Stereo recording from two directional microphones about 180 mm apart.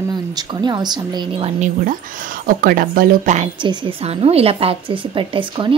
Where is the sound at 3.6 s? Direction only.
30° right (ahead or behind).